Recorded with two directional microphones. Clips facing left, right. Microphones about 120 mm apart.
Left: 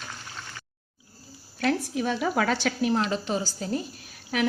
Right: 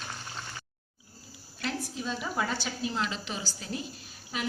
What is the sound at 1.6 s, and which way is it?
A woman's voice, 65° left (ahead or behind).